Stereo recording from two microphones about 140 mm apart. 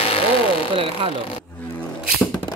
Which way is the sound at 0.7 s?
40° right (ahead or behind).